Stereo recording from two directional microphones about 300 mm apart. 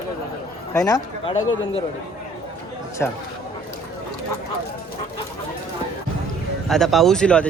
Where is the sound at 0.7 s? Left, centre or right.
Centre.